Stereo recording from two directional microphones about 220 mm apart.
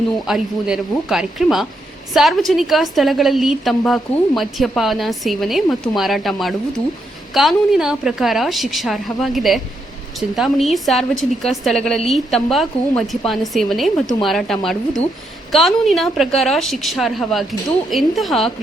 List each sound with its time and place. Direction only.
0.3 s a woman's voice: centre (ahead or behind)